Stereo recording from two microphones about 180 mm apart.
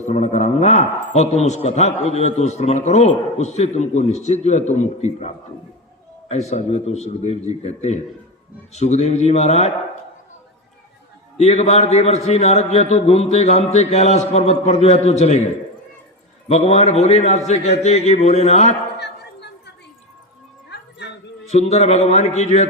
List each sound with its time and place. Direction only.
0.1 s a man's voice: 40° left (ahead or behind)
11.3 s a man's voice: 40° left (ahead or behind)
16.5 s a man's voice: 35° left (ahead or behind)
18.9 s a sound: 70° left (ahead or behind)
21.0 s dog: 70° left (ahead or behind)
21.4 s a man's voice: 35° left (ahead or behind)